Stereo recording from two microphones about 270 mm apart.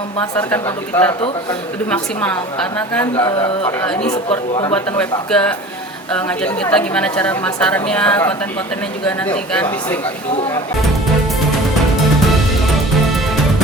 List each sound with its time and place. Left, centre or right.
0.3 s a woman's voice: centre
4.7 s a woman's voice: centre